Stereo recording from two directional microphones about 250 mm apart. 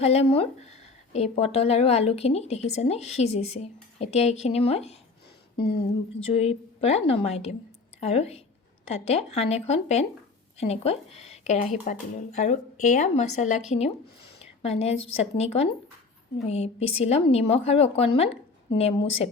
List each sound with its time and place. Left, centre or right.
0.0 s speech: left
5.5 s speech: left
6.3 s speech: left
14.6 s a woman's voice: left